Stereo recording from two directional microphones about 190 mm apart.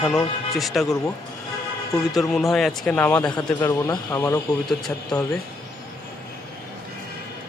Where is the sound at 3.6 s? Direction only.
20° left (ahead or behind).